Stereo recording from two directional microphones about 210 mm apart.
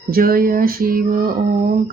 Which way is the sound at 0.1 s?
45° right (ahead or behind).